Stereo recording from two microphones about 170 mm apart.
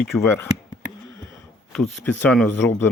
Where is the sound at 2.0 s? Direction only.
10° left (ahead or behind).